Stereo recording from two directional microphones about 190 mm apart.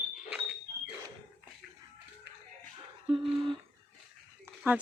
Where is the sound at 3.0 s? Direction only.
25° right (ahead or behind).